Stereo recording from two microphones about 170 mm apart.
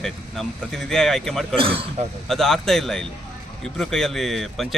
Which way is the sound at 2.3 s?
Centre (ahead or behind).